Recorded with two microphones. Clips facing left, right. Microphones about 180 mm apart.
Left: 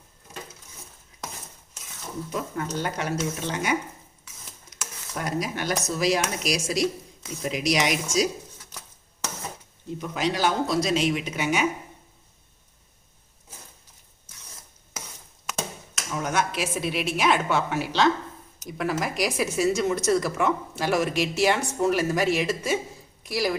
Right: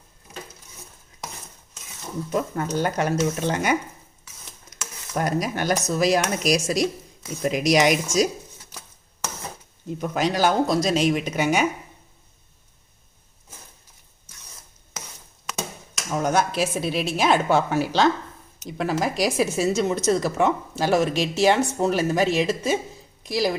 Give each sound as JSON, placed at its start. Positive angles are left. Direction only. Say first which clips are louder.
{"t": 2.3, "sound": "speech", "louder": "right 6 dB", "side_deg": -45}
{"t": 5.1, "sound": "speech", "louder": "right 5 dB", "side_deg": -45}
{"t": 10.0, "sound": "speech", "louder": "right 4 dB", "side_deg": -45}
{"t": 16.1, "sound": "speech", "louder": "right 5 dB", "side_deg": -35}
{"t": 18.6, "sound": "a woman's voice", "louder": "right 3 dB", "side_deg": -30}